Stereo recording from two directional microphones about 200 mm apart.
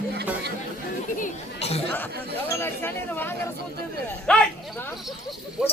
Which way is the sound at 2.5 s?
10° left (ahead or behind).